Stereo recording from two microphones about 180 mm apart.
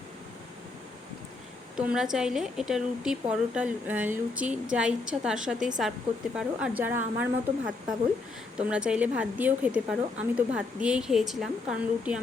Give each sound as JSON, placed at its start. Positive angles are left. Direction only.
{"t": 2.1, "sound": "a woman's voice", "side_deg": -5}